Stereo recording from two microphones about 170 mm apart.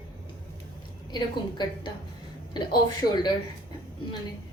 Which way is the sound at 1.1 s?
25° left (ahead or behind).